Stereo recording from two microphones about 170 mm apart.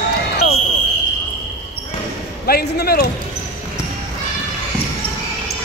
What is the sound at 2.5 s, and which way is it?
Speech, 65° left (ahead or behind).